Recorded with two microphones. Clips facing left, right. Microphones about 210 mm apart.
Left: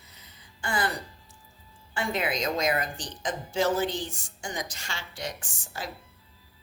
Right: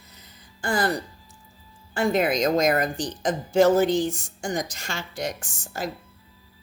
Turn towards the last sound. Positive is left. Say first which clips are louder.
# right 7 dB
turn(degrees=-45)  # may be behind; listen again after turning